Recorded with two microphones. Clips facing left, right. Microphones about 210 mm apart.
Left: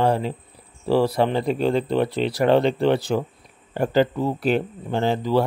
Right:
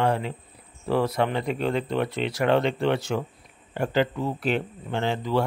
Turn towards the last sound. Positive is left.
turn(degrees=35)  # may be behind; listen again after turning